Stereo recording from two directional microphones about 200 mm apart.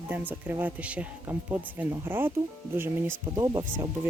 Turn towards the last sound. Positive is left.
turn(degrees=-15)  # may be behind; listen again after turning